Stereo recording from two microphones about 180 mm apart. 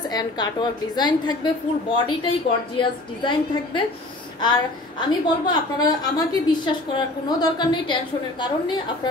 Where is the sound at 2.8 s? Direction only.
25° left (ahead or behind).